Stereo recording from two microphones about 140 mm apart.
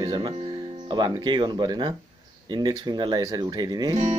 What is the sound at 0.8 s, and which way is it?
Speech, 35° right (ahead or behind).